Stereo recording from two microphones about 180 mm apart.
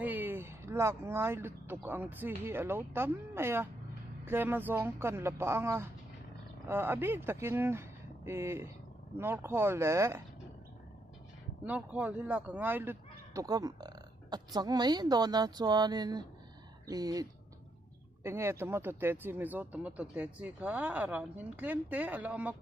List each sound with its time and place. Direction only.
0.0 s speech: 10° right (ahead or behind)
11.6 s speech: 10° right (ahead or behind)